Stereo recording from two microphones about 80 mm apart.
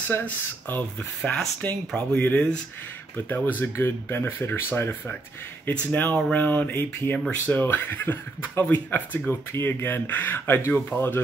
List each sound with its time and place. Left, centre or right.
0.1 s speech: left
3.7 s speech: left